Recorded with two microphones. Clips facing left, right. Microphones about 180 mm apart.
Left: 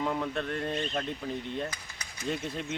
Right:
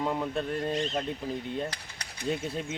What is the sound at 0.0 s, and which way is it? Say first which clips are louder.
Speech: right 1 dB; 15° right (ahead or behind).